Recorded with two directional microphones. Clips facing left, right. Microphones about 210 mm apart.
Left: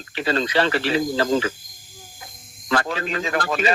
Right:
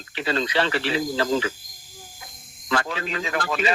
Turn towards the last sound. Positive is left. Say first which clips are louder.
# left 3 dB
turn(degrees=45)  # may be behind; listen again after turning